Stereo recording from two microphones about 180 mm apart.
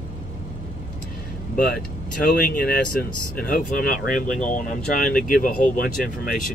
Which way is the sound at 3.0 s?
50° left (ahead or behind).